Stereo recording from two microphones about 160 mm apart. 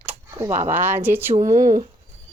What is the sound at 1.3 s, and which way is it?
Speech, 50° right (ahead or behind).